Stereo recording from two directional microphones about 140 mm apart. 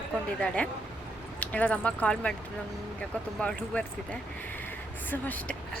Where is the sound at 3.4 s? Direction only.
10° left (ahead or behind).